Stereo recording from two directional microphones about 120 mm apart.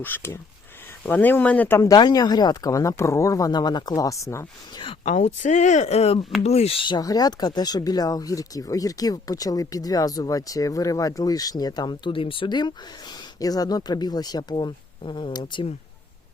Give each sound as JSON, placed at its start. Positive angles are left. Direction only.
{"t": 0.0, "sound": "speech", "side_deg": 20}
{"t": 1.8, "sound": "speech", "side_deg": 35}
{"t": 4.7, "sound": "speech", "side_deg": 45}
{"t": 5.0, "sound": "speech", "side_deg": 75}